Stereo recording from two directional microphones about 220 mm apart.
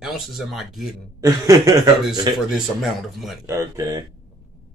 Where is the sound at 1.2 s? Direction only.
15° right (ahead or behind).